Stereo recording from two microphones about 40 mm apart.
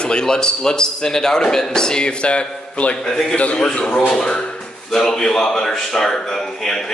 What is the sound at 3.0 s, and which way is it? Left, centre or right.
Speech, centre.